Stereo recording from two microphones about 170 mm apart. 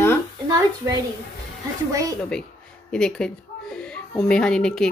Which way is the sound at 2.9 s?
5° left (ahead or behind).